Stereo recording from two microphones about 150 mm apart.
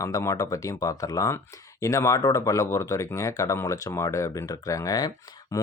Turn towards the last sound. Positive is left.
turn(degrees=25)  # may be behind; listen again after turning